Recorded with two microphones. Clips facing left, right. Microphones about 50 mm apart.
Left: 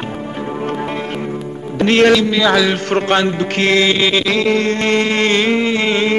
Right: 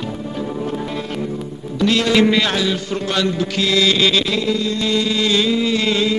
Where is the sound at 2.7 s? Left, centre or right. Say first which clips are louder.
Left 6 dB; left.